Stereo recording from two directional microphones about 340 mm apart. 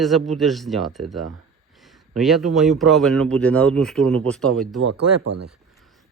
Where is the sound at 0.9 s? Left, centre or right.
Right.